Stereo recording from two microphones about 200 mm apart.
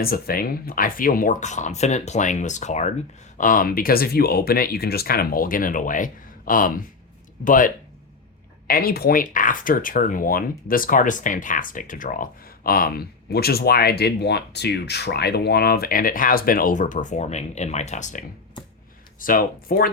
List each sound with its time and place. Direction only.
0.0 s speech: 50° left (ahead or behind)